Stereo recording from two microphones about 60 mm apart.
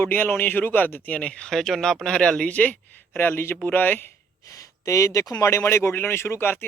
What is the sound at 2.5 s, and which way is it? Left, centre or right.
Speech, left.